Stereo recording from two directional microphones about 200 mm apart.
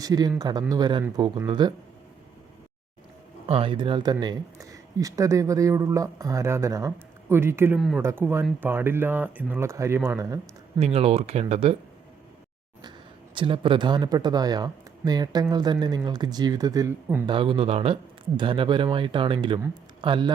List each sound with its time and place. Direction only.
0.0 s speech: 20° right (ahead or behind)
3.4 s speech: 25° right (ahead or behind)
10.8 s speech: 30° right (ahead or behind)
13.3 s speech: 25° right (ahead or behind)
17.2 s speech: 25° right (ahead or behind)